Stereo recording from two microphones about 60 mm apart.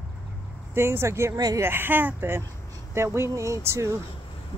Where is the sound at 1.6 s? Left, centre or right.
Right.